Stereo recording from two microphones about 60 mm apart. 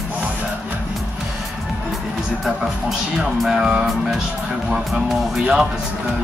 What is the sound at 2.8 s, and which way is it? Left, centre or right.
Speech, centre.